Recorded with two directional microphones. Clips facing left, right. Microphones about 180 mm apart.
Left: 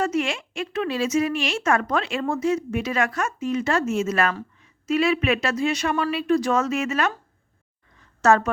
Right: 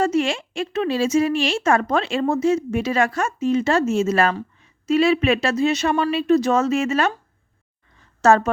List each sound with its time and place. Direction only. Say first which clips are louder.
0.0 s speech: right 4 dB; 30° right (ahead or behind)
8.2 s a woman's voice: right 3 dB; 30° right (ahead or behind)